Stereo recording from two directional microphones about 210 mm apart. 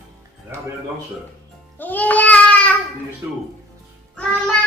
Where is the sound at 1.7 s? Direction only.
10° left (ahead or behind).